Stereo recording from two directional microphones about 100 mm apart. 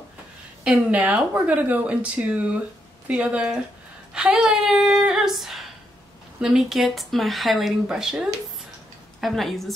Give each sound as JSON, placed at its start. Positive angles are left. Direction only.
{"t": 0.7, "sound": "speech", "side_deg": -10}